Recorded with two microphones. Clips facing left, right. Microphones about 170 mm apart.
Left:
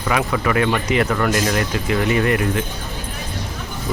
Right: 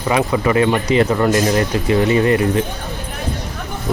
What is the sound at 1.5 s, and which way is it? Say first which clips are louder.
Speech: right 4 dB; 35° right (ahead or behind).